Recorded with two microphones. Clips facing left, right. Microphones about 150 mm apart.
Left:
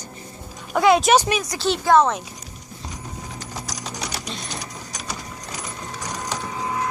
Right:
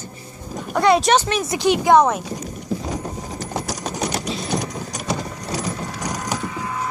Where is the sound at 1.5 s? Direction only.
15° right (ahead or behind).